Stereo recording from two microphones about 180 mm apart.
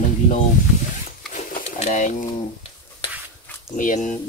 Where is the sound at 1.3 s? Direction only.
45° left (ahead or behind).